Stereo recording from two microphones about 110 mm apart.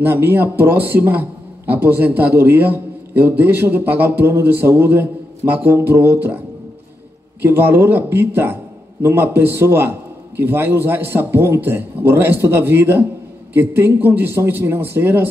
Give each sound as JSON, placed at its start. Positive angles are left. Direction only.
{"t": 0.0, "sound": "a man's voice", "side_deg": -20}
{"t": 7.4, "sound": "a man's voice", "side_deg": -20}